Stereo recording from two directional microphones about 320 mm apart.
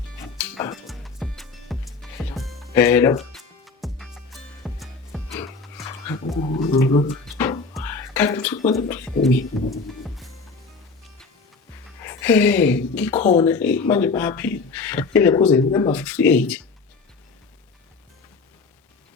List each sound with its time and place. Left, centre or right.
0.3 s music: centre
6.6 s speech: centre
7.3 s music: centre
8.7 s speech: centre
10.0 s music: centre
12.0 s speech: centre
13.1 s speech: centre
13.4 s speech: centre